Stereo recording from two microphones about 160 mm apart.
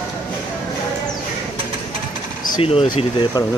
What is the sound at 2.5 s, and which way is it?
Speech, 30° left (ahead or behind).